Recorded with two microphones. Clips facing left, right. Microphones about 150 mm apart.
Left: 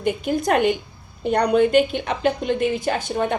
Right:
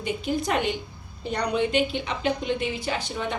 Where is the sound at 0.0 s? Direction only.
50° left (ahead or behind).